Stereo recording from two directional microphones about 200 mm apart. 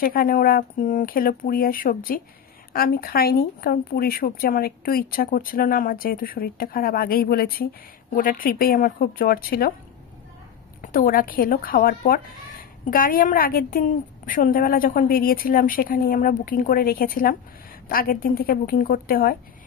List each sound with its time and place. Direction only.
0.0 s speech: 45° left (ahead or behind)
10.8 s speech: 45° left (ahead or behind)